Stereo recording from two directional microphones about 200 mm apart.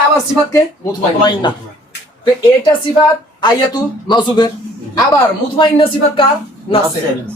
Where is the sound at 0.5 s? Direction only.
20° left (ahead or behind).